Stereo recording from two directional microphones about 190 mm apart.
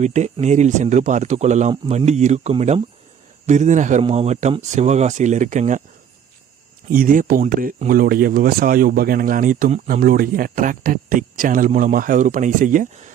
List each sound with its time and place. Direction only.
0.0 s speech: 35° right (ahead or behind)
6.9 s speech: 45° right (ahead or behind)